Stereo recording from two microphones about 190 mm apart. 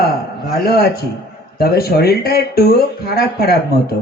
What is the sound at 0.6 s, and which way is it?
Speech, 55° left (ahead or behind).